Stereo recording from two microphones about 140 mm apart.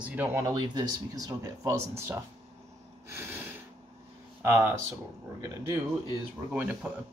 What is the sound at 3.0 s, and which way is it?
Snort, 15° right (ahead or behind).